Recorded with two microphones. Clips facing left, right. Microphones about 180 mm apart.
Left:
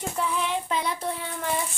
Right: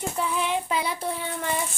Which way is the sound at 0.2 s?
Centre (ahead or behind).